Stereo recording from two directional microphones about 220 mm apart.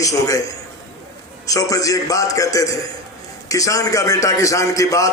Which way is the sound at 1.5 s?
15° left (ahead or behind).